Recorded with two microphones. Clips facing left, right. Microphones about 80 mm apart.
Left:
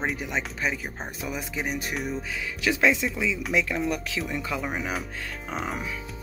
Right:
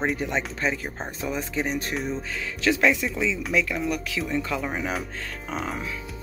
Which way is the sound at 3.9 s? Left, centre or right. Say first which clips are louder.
Right 1 dB; left.